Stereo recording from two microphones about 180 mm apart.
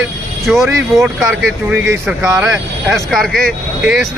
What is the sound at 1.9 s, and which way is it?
Speech, 15° right (ahead or behind).